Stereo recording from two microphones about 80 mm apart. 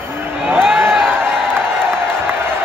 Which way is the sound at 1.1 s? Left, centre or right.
Right.